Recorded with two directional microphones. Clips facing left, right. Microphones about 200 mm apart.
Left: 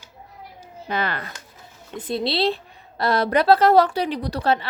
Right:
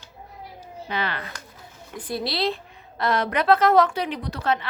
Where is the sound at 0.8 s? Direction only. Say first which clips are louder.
Left 3 dB; 45° left (ahead or behind).